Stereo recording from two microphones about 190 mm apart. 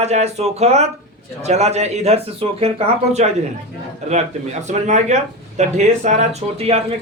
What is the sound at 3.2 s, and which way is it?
Speech, 40° right (ahead or behind).